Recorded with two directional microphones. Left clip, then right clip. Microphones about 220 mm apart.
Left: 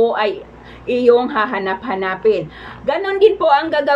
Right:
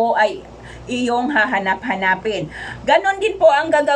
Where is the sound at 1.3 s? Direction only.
15° left (ahead or behind).